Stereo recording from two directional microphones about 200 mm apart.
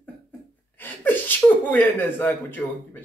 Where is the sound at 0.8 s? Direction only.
10° left (ahead or behind).